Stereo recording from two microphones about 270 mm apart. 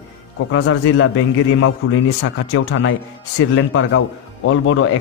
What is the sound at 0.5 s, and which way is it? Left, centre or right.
A man's voice, left.